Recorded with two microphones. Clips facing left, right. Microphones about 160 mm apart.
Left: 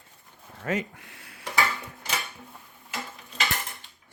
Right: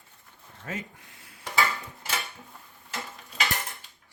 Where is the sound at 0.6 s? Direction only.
70° left (ahead or behind).